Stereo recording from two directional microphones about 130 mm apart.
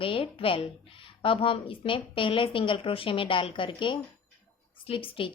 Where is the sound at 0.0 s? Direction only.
45° left (ahead or behind).